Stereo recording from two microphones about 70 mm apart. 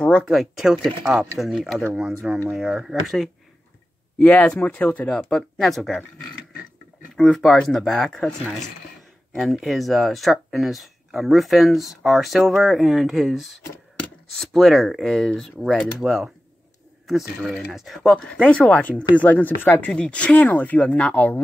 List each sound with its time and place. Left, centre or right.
0.3 s speech: centre
4.2 s speech: centre
7.2 s speech: centre
16.0 s speech: centre
17.7 s speech: centre
18.3 s speech: centre